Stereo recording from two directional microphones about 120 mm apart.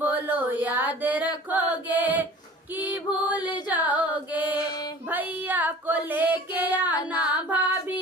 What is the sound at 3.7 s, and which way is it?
Carnatic music, 15° right (ahead or behind).